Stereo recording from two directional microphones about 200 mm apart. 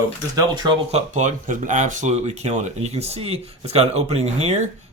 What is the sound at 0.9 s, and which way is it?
Speech, 40° right (ahead or behind).